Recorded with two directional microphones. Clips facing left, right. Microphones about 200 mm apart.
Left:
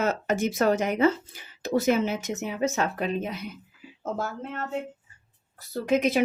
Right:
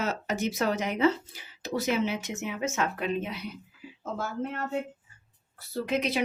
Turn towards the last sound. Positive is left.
turn(degrees=50)  # may be behind; listen again after turning